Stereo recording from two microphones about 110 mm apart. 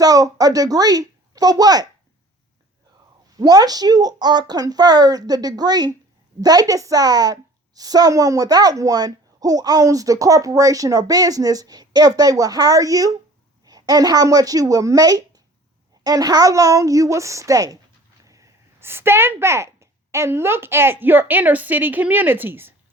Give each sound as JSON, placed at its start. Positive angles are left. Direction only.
{"t": 0.0, "sound": "speech", "side_deg": -35}
{"t": 3.3, "sound": "a woman's voice", "side_deg": -35}